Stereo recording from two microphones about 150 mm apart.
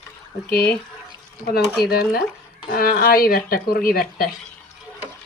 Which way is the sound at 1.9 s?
90° left.